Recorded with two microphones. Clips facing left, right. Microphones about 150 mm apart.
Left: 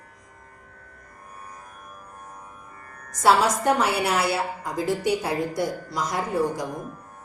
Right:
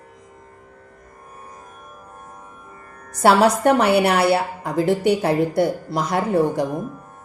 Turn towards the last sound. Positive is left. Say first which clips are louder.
# right 6 dB
turn(degrees=-65)  # may be behind; listen again after turning